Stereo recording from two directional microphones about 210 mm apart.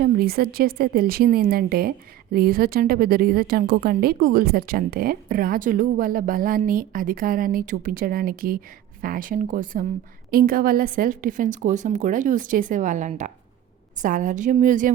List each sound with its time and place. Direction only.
0.0 s a woman's voice: 45° right (ahead or behind)